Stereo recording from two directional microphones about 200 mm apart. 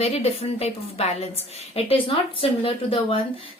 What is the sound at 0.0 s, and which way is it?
A woman's voice, 30° left (ahead or behind).